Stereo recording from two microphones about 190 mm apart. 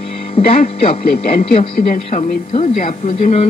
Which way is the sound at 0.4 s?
30° left (ahead or behind).